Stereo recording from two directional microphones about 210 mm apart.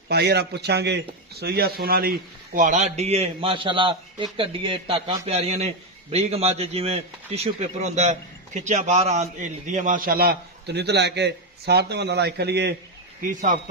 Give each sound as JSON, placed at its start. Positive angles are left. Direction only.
{"t": 0.1, "sound": "a man's voice", "side_deg": -50}